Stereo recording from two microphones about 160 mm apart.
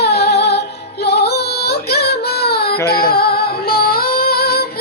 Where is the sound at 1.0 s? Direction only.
90° left.